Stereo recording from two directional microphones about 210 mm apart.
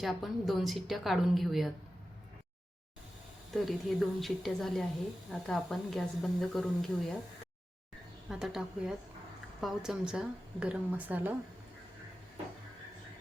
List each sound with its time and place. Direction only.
0.0 s speech: centre (ahead or behind)
3.5 s speech: centre (ahead or behind)
8.3 s speech: centre (ahead or behind)